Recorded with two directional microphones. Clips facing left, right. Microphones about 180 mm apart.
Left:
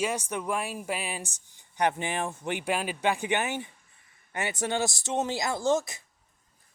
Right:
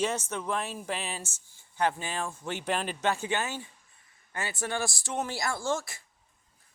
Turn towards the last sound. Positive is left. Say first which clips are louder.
# left 6 dB
turn(degrees=20)  # may be behind; listen again after turning